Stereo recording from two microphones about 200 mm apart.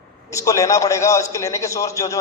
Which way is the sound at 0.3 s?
15° left (ahead or behind).